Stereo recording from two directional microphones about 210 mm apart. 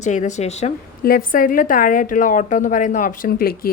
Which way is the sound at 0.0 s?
35° left (ahead or behind).